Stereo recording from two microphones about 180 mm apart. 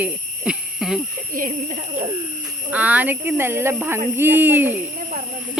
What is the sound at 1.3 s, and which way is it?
Speech, 50° right (ahead or behind).